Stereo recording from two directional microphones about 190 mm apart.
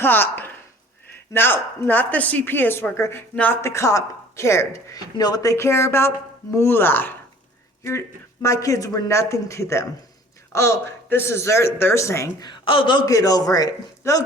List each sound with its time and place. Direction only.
0.0 s speech: 10° left (ahead or behind)